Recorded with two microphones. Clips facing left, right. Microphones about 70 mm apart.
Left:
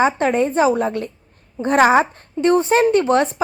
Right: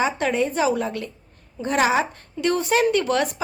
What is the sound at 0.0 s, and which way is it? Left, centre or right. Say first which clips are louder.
Speech: left 5 dB; left.